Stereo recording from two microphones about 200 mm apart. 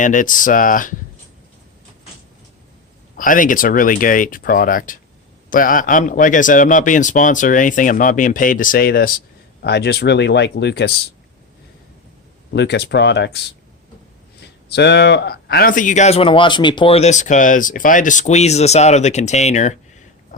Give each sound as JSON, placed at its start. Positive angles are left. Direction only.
{"t": 0.0, "sound": "speech", "side_deg": 40}
{"t": 3.2, "sound": "speech", "side_deg": 40}
{"t": 12.5, "sound": "speech", "side_deg": 55}
{"t": 14.7, "sound": "speech", "side_deg": 60}